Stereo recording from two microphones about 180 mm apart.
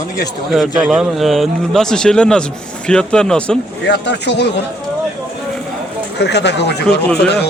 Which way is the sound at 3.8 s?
70° left (ahead or behind).